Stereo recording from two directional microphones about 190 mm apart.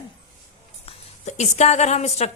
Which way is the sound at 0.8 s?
35° left (ahead or behind).